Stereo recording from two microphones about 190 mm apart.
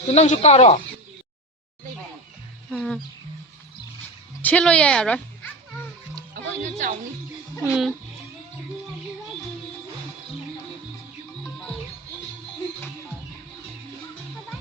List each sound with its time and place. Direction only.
0.1 s speech: 35° left (ahead or behind)
2.7 s speech: 5° left (ahead or behind)
4.4 s speech: 5° left (ahead or behind)
6.3 s music: 45° right (ahead or behind)
7.6 s speech: 5° right (ahead or behind)